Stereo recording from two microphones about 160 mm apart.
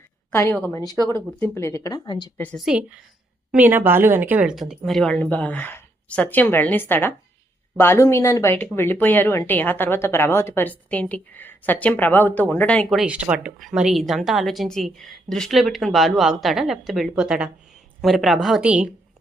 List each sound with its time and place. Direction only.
0.3 s speech: 10° left (ahead or behind)
2.6 s speech: 5° right (ahead or behind)